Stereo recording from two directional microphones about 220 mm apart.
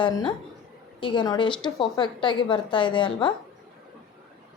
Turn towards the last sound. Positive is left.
turn(degrees=20)  # may be behind; listen again after turning